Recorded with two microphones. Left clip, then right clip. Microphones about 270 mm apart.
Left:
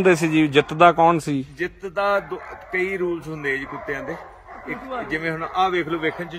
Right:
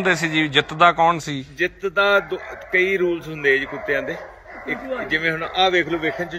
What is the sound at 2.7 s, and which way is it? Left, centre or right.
A man's voice, centre.